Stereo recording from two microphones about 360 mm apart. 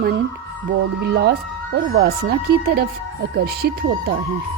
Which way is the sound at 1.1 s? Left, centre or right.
Right.